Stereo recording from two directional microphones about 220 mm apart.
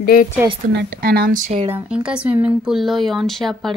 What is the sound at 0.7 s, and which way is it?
Speech, 50° right (ahead or behind).